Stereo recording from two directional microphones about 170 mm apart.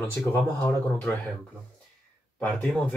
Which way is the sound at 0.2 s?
15° left (ahead or behind).